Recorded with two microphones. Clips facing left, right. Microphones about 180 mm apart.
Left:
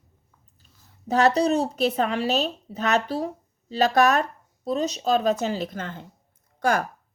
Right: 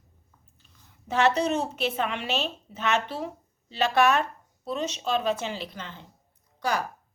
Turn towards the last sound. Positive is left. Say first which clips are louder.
# left 5 dB
turn(degrees=50)  # may be behind; listen again after turning